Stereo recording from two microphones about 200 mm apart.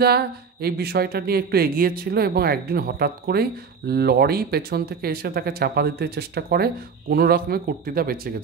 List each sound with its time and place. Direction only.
0.0 s speech: 50° right (ahead or behind)